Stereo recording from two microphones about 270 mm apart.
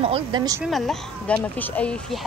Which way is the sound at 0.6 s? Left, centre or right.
Centre.